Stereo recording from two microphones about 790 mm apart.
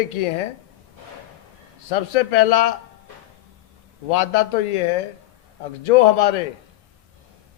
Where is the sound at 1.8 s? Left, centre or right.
Left.